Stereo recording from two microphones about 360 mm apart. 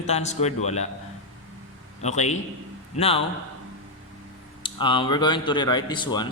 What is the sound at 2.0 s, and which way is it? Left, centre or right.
Speech, centre.